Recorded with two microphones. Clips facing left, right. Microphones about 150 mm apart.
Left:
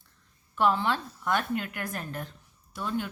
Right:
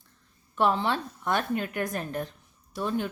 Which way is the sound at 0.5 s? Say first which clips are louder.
Right 1 dB; 20° right (ahead or behind).